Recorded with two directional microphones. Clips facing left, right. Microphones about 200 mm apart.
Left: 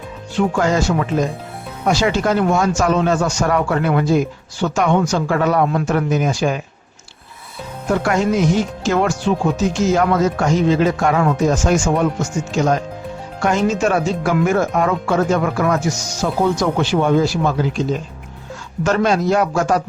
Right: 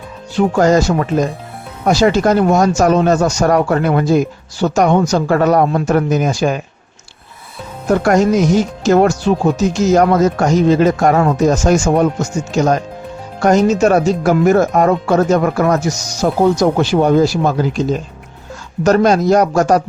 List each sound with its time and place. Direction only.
0.3 s speech: 40° right (ahead or behind)
7.9 s speech: 45° right (ahead or behind)